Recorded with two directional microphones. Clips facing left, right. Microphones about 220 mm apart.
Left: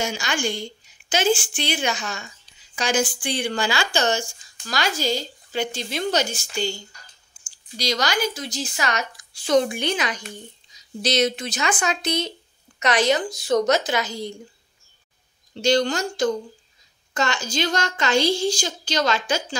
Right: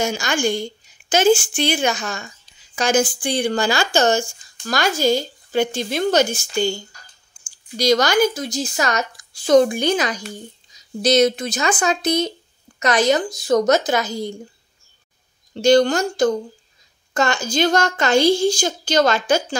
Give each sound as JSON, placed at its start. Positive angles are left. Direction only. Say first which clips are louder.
{"t": 0.0, "sound": "speech", "louder": "right 5 dB", "side_deg": -45}
{"t": 7.7, "sound": "speech", "louder": "right 8 dB", "side_deg": -50}
{"t": 15.5, "sound": "speech", "louder": "right 6 dB", "side_deg": -50}